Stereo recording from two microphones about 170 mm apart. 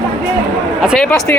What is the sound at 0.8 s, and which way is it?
Speech, 5° left (ahead or behind).